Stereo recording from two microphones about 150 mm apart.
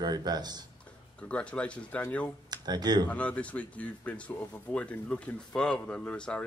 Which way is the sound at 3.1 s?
10° left (ahead or behind).